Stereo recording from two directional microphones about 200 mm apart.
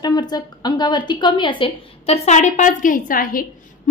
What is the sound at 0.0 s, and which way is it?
A woman's voice, 20° left (ahead or behind).